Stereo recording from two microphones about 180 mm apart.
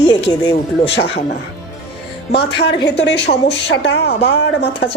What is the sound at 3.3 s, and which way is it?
Speech, 50° left (ahead or behind).